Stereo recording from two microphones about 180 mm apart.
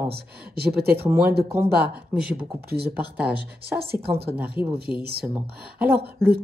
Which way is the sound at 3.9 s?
60° right (ahead or behind).